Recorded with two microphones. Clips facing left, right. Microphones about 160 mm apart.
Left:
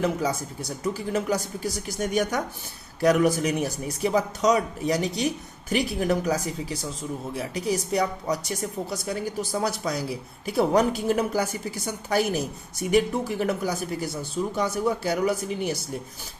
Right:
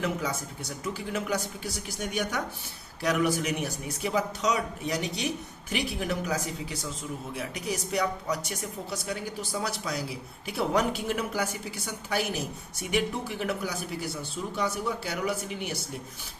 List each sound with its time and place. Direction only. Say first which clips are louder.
0.0 s a woman's voice: left 5 dB; 35° left (ahead or behind)
12.9 s a woman's voice: left 7 dB; 40° left (ahead or behind)